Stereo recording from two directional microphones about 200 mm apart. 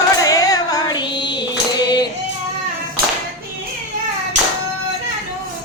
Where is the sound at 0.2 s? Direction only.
15° left (ahead or behind).